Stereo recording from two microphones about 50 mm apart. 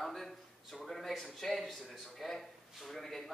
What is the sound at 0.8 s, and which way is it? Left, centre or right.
Speech, centre.